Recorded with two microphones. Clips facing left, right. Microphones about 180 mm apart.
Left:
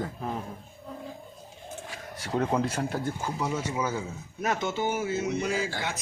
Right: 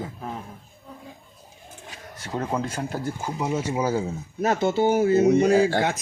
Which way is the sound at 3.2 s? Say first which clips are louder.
Right 4 dB; 20° right (ahead or behind).